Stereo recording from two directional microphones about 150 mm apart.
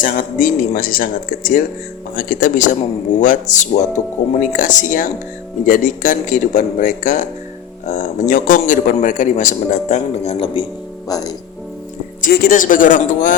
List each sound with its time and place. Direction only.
0.0 s a man's voice: 65° left (ahead or behind); by 11.3 s 25° left (ahead or behind)
12.2 s a man's voice: 80° left; by 13.3 s 60° left (ahead or behind)